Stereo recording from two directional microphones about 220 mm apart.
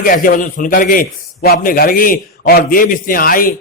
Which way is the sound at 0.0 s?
40° left (ahead or behind).